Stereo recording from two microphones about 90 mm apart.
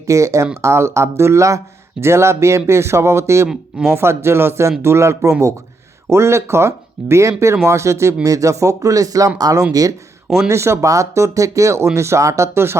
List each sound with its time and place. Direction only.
0.0 s speech: 35° right (ahead or behind)
3.5 s speech: 5° right (ahead or behind)
3.9 s speech: 30° right (ahead or behind)
10.2 s speech: 5° right (ahead or behind)
10.5 s speech: 30° right (ahead or behind)